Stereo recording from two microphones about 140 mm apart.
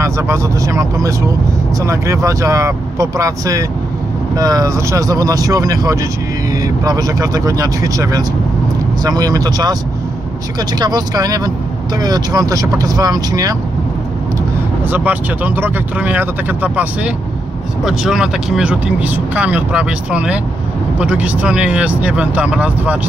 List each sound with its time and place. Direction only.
0.0 s speech: 20° right (ahead or behind)
10.8 s speech: 30° right (ahead or behind)
14.9 s speech: 10° right (ahead or behind)